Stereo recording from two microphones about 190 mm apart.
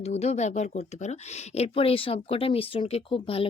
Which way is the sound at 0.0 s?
35° left (ahead or behind).